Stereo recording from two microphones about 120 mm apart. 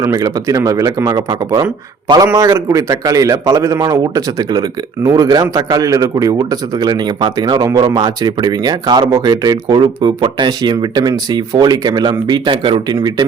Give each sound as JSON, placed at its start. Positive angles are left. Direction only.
{"t": 0.0, "sound": "a man's voice", "side_deg": -25}